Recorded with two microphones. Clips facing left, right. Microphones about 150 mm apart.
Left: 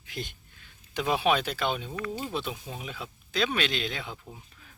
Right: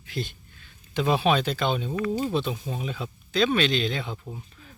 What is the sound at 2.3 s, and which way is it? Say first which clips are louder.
Speech: right 6 dB; 5° left (ahead or behind).